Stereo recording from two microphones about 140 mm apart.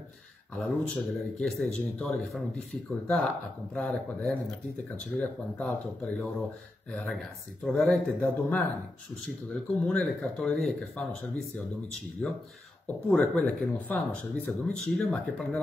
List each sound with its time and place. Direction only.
0.6 s speech: centre (ahead or behind)